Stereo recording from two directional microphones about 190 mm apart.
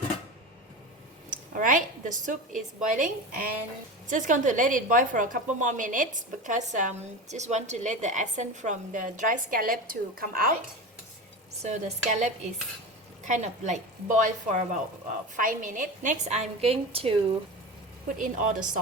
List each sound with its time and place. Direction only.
1.3 s a woman's voice: 45° right (ahead or behind)
11.6 s a woman's voice: 40° right (ahead or behind)
18.2 s a woman's voice: 45° right (ahead or behind)